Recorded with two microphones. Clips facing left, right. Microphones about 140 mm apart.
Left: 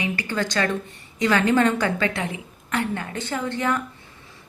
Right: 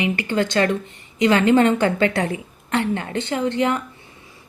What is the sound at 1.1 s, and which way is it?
A woman's voice, 20° right (ahead or behind).